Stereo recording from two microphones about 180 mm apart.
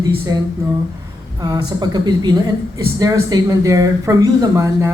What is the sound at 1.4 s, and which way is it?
A woman's voice, 20° right (ahead or behind).